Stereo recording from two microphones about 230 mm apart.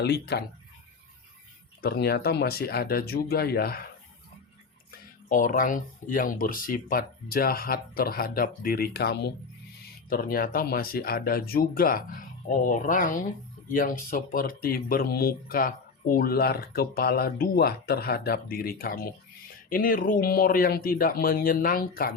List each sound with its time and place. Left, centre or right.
0.0 s speech: left
1.8 s speech: left
4.9 s speech: left